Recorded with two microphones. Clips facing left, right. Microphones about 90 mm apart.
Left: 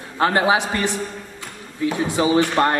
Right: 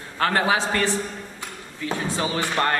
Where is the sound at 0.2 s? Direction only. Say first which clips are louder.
Left 4 dB; 20° left (ahead or behind).